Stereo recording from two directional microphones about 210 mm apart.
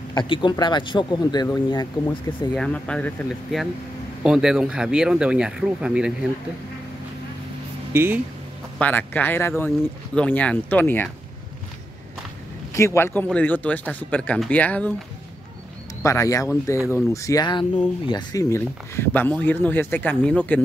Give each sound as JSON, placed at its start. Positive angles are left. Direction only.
{"t": 0.1, "sound": "speech", "side_deg": 20}
{"t": 2.5, "sound": "speech", "side_deg": 5}
{"t": 7.9, "sound": "speech", "side_deg": -10}
{"t": 8.7, "sound": "speech", "side_deg": 10}
{"t": 12.7, "sound": "speech", "side_deg": 15}
{"t": 16.0, "sound": "speech", "side_deg": 15}